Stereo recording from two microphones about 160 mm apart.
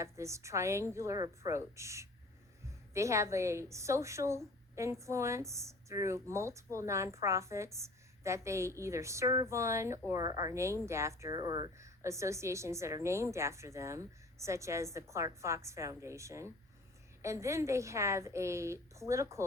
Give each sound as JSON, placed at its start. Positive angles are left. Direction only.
{"t": 0.0, "sound": "a woman's voice", "side_deg": -20}